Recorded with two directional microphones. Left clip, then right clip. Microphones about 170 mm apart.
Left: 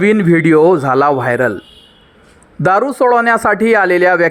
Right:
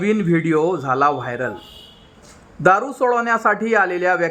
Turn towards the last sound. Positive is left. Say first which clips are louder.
# left 7 dB
turn(degrees=30)  # may be behind; listen again after turning